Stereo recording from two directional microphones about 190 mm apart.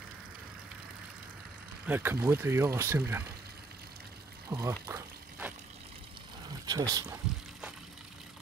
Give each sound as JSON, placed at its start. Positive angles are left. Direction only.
{"t": 1.9, "sound": "speech", "side_deg": -10}
{"t": 4.5, "sound": "a sound", "side_deg": -15}
{"t": 6.6, "sound": "speech", "side_deg": -20}